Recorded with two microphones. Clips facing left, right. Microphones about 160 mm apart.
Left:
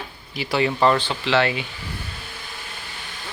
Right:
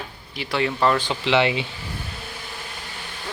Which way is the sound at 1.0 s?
20° right (ahead or behind).